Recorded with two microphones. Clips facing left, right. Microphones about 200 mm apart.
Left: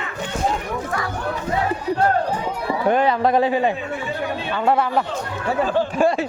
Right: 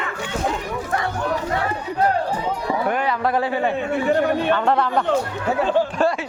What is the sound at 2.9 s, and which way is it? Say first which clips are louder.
A man's voice: left 7 dB; 25° left (ahead or behind).